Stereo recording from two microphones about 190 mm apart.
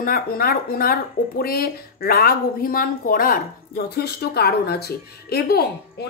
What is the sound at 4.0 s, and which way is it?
Speech, 55° left (ahead or behind).